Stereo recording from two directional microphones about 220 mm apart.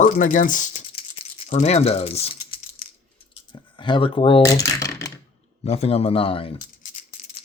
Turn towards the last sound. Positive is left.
turn(degrees=25)  # may be behind; listen again after turning